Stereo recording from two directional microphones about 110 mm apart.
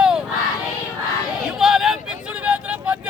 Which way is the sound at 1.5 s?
5° right (ahead or behind).